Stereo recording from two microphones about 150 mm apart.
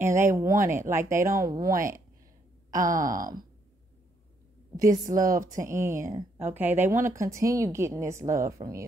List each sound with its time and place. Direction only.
0.0 s speech: 20° right (ahead or behind)
2.7 s speech: 65° right (ahead or behind)
4.7 s speech: 25° right (ahead or behind)